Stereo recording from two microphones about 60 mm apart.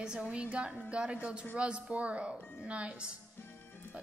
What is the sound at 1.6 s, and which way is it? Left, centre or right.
A woman's voice, centre.